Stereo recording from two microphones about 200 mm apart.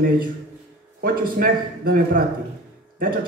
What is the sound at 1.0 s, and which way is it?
A man's voice, 45° right (ahead or behind).